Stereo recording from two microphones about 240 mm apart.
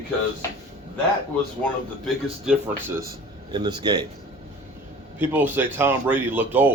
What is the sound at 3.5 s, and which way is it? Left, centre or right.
Speech, centre.